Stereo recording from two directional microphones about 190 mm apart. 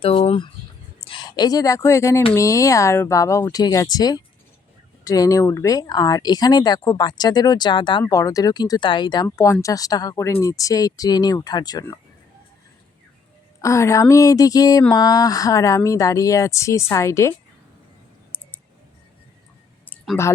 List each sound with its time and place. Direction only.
0.0 s speech: 30° left (ahead or behind)
13.6 s speech: 15° left (ahead or behind)
19.9 s a sound: 10° left (ahead or behind)